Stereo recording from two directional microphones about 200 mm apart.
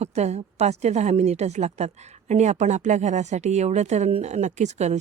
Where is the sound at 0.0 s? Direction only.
35° right (ahead or behind).